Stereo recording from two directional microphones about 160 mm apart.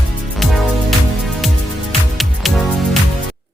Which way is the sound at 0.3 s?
Centre (ahead or behind).